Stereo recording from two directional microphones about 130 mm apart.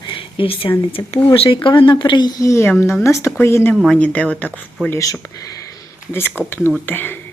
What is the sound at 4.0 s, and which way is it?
Speech, 10° left (ahead or behind).